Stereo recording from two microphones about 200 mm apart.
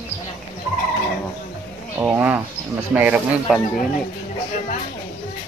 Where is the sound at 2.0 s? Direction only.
10° right (ahead or behind).